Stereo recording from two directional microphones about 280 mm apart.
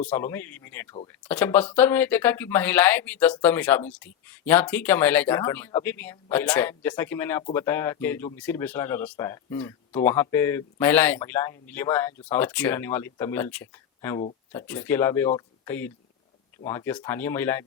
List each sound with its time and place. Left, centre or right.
0.0 s speech: centre